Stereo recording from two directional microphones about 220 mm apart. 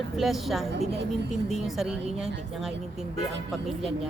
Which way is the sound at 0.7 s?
50° right (ahead or behind).